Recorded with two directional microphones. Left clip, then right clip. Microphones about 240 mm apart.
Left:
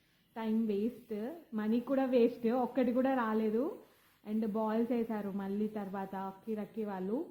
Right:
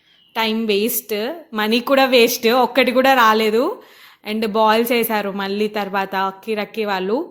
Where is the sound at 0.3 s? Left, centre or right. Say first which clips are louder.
Right 17 dB; right.